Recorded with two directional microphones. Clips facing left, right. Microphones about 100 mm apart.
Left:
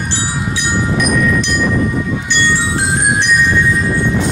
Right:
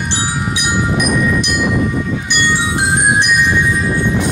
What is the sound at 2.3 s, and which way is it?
Music, 15° right (ahead or behind).